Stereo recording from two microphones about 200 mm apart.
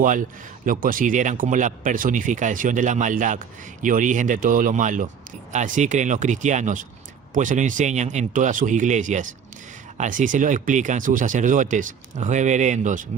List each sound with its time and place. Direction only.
0.0 s speech: 40° right (ahead or behind)